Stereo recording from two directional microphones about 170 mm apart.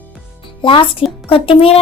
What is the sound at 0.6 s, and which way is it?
A woman's voice, 30° left (ahead or behind).